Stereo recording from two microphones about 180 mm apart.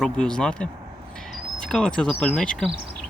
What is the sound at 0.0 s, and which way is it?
Speech, 5° left (ahead or behind).